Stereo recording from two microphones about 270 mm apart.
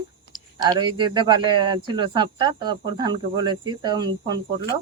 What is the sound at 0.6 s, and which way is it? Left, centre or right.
Speech, centre.